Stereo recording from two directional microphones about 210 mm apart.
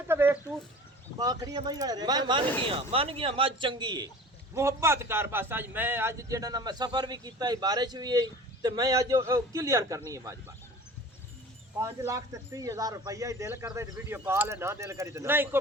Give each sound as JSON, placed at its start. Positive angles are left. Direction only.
{"t": 0.1, "sound": "a sound", "side_deg": -10}
{"t": 1.2, "sound": "a man's voice", "side_deg": -15}
{"t": 11.8, "sound": "a man's voice", "side_deg": -15}